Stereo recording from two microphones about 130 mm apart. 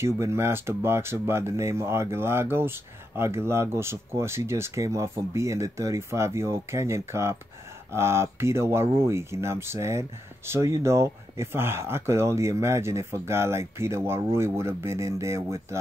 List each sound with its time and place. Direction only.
0.0 s speech: 20° right (ahead or behind)